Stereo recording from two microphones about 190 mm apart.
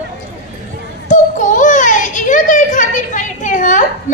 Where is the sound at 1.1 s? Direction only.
40° left (ahead or behind).